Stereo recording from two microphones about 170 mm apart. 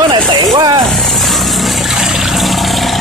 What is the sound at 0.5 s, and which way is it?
Vehicle, 25° right (ahead or behind).